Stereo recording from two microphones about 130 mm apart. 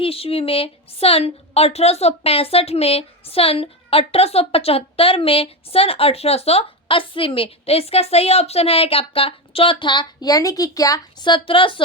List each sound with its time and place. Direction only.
0.0 s a woman's voice: 45° left (ahead or behind)